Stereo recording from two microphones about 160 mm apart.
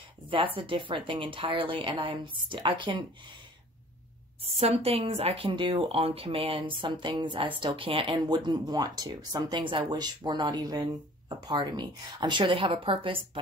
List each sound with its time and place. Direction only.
0.6 s speech: 30° right (ahead or behind)
4.5 s speech: 40° right (ahead or behind)